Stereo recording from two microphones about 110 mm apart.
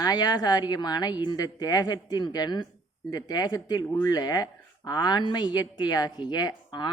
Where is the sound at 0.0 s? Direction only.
35° left (ahead or behind).